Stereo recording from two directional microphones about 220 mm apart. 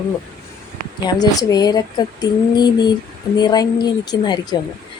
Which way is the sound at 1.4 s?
15° left (ahead or behind).